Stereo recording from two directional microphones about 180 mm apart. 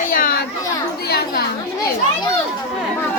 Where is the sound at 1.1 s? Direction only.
60° left (ahead or behind).